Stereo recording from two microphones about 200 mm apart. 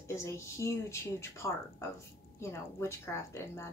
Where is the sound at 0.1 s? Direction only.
15° left (ahead or behind).